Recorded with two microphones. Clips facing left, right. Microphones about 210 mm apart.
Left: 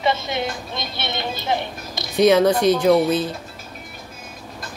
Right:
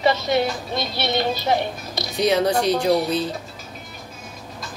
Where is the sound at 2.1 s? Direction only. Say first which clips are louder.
Left 4 dB; 50° left (ahead or behind).